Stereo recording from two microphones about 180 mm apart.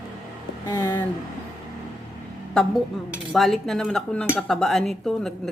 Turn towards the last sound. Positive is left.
turn(degrees=0)  # may be behind; listen again after turning